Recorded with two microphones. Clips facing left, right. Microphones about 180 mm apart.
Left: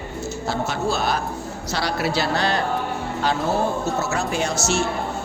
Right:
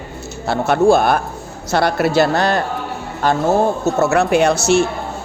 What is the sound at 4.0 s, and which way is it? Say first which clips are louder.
Speech: right 10 dB; 65° right (ahead or behind).